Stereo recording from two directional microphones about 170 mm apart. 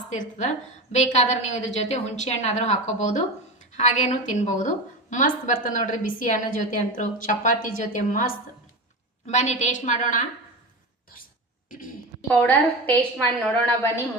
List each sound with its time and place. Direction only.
0.1 s a woman's voice: 45° left (ahead or behind)
12.3 s a woman's voice: 10° left (ahead or behind)